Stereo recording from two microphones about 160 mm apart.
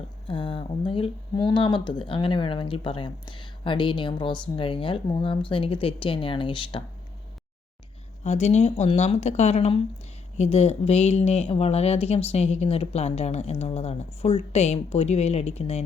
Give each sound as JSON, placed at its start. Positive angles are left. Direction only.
{"t": 0.3, "sound": "speech", "side_deg": 30}
{"t": 8.2, "sound": "speech", "side_deg": 45}